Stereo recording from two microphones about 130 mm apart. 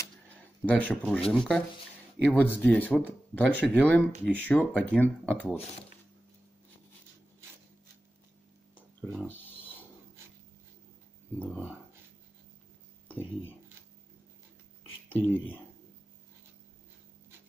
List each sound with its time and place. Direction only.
0.7 s speech: 10° left (ahead or behind)
9.2 s a sound: 15° left (ahead or behind)
11.5 s speech: 10° right (ahead or behind)
15.0 s speech: 15° left (ahead or behind)